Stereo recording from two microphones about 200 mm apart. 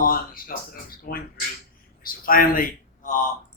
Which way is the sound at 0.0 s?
45° left (ahead or behind).